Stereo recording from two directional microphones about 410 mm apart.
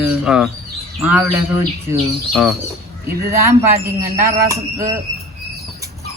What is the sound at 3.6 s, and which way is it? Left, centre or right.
Speech, centre.